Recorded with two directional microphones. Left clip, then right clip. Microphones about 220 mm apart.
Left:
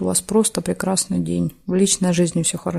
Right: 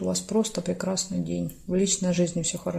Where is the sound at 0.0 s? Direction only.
45° left (ahead or behind).